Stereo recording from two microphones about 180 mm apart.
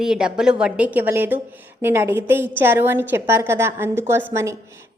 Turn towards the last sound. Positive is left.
turn(degrees=-15)  # may be behind; listen again after turning